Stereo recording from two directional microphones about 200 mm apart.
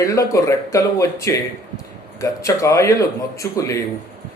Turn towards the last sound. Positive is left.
turn(degrees=15)  # may be behind; listen again after turning